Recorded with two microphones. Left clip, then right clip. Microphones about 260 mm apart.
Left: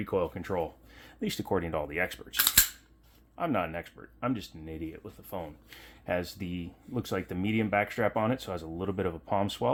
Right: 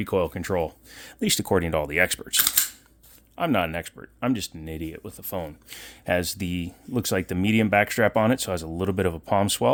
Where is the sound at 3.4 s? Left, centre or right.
Right.